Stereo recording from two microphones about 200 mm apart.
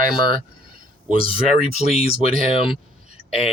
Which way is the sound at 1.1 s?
30° left (ahead or behind).